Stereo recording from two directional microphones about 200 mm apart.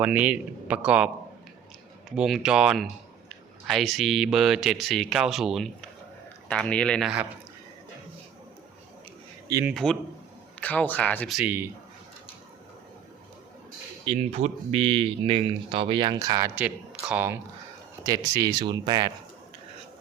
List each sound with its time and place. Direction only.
0.0 s speech: 5° right (ahead or behind)
2.1 s speech: centre (ahead or behind)
9.5 s a man's voice: 15° right (ahead or behind)
9.7 s speech: 5° left (ahead or behind)
11.3 s a man's voice: 10° right (ahead or behind)
14.0 s speech: 30° right (ahead or behind)
16.6 s speech: 5° right (ahead or behind)